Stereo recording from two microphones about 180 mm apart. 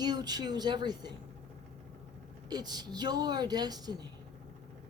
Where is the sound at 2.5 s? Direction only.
20° right (ahead or behind).